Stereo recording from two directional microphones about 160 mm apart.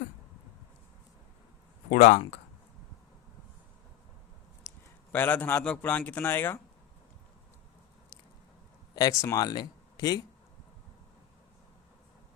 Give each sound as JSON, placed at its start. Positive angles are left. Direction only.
{"t": 1.9, "sound": "speech", "side_deg": 45}
{"t": 5.1, "sound": "a man's voice", "side_deg": 10}
{"t": 9.0, "sound": "speech", "side_deg": 20}